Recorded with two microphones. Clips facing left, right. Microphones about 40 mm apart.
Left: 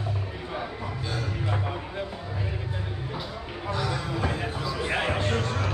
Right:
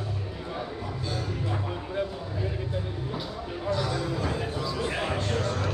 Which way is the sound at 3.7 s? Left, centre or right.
Left.